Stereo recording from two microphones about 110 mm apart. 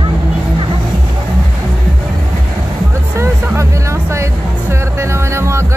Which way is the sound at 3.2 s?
25° right (ahead or behind).